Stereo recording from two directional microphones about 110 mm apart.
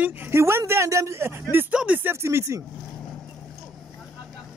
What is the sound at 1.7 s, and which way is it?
Speech, 10° right (ahead or behind).